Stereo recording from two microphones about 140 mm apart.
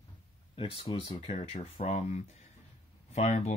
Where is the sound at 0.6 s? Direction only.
40° left (ahead or behind).